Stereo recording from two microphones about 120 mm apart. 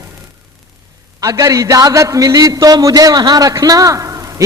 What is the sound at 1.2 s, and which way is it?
A man's voice, 25° right (ahead or behind).